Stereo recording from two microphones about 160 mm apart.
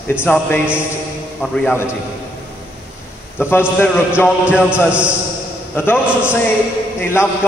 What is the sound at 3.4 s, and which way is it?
Speech, 15° left (ahead or behind).